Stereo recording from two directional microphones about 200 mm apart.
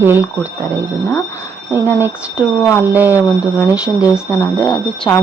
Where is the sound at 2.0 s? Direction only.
10° right (ahead or behind).